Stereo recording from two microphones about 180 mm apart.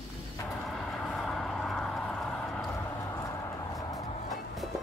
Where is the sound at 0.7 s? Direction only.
Centre (ahead or behind).